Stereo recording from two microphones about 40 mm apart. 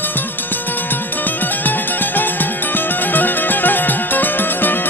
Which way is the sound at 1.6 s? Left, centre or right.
Left.